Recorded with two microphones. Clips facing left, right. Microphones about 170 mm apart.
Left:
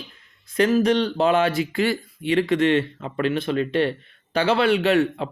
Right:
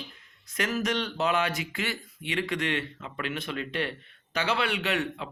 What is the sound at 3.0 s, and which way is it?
Speech, 45° left (ahead or behind).